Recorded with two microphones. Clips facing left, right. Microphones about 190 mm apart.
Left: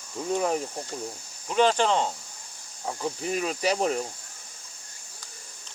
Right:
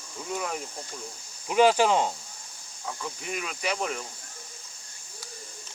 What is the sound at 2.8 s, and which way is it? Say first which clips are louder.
Speech: left 6 dB; 35° left (ahead or behind).